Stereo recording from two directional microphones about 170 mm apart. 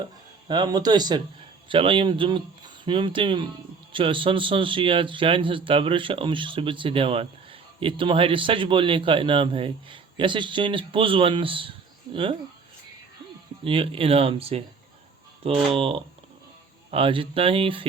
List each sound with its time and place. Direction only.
0.4 s speech: 25° right (ahead or behind)
13.7 s speech: 30° right (ahead or behind)